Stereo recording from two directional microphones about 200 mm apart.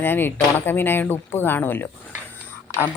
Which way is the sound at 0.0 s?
10° left (ahead or behind).